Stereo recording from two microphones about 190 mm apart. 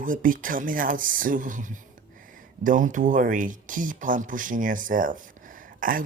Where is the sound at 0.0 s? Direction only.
45° right (ahead or behind).